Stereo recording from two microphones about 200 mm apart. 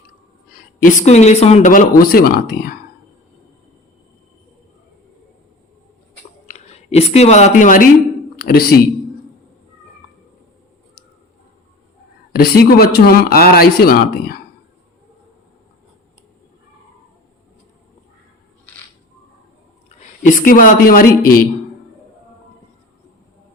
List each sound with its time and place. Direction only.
0.5 s speech: 40° left (ahead or behind)
6.5 s speech: 30° left (ahead or behind); by 8.8 s 50° left (ahead or behind)
12.3 s speech: 50° left (ahead or behind)
20.0 s a woman's voice: 40° left (ahead or behind)